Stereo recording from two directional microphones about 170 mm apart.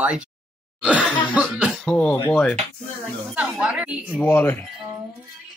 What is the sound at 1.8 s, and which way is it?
Speech, 5° left (ahead or behind).